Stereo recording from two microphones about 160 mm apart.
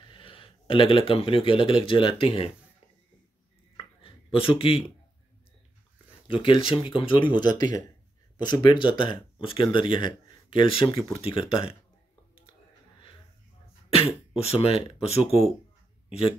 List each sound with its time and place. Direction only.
0.1 s speech: 35° left (ahead or behind)
3.7 s a sound: 35° left (ahead or behind)
6.2 s speech: 35° left (ahead or behind)
10.9 s speech: 20° left (ahead or behind)
11.1 s speech: 35° left (ahead or behind)
13.8 s speech: 35° left (ahead or behind)